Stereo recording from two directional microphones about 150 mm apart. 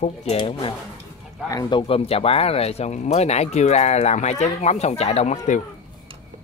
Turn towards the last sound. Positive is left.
turn(degrees=50)  # may be behind; listen again after turning